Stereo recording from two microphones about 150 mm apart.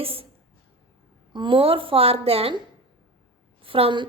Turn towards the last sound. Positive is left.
turn(degrees=-35)  # may be behind; listen again after turning